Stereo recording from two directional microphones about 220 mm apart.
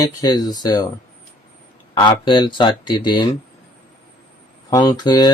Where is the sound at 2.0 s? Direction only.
20° left (ahead or behind).